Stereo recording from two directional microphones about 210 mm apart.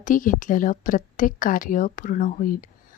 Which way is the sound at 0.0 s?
40° left (ahead or behind).